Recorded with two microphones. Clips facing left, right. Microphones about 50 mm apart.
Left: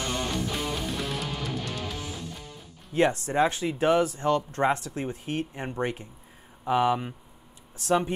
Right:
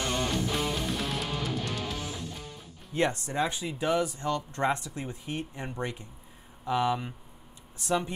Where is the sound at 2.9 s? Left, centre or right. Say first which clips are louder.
Left 4 dB; centre.